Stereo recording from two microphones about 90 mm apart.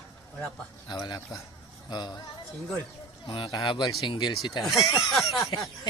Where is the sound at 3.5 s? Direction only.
55° left (ahead or behind).